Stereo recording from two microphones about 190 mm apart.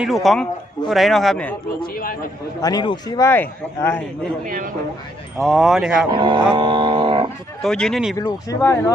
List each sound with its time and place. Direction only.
0.0 s speech: centre (ahead or behind)
1.9 s a man's voice: 50° left (ahead or behind)
2.6 s a man's voice: 20° left (ahead or behind)
4.4 s a man's voice: 45° right (ahead or behind)
5.4 s speech: centre (ahead or behind)
6.1 s a sound: 25° right (ahead or behind)
7.6 s speech: 5° left (ahead or behind)
8.2 s a man's voice: 15° left (ahead or behind)